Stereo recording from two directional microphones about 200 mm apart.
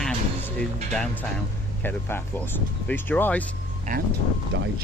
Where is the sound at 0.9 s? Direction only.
5° left (ahead or behind).